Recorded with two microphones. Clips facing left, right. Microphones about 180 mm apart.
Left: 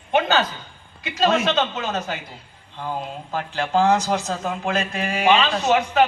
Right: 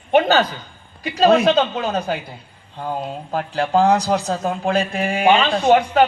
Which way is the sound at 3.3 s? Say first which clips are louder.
Right 3 dB; 35° right (ahead or behind).